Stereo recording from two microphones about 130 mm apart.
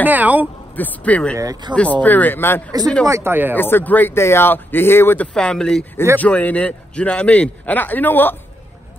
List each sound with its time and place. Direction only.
0.1 s speech: 10° right (ahead or behind)
0.7 s speech: 10° left (ahead or behind)
1.4 s speech: 30° right (ahead or behind)
1.8 s speech: 10° left (ahead or behind)
3.1 s speech: 20° right (ahead or behind)
3.5 s speech: 15° left (ahead or behind)